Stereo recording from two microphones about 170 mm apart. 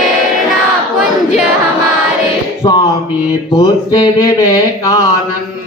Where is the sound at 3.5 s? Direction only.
25° left (ahead or behind).